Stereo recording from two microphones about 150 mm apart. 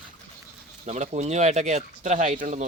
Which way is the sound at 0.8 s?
50° right (ahead or behind).